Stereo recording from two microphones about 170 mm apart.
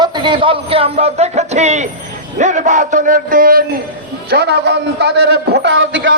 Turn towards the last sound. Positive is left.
turn(degrees=-90)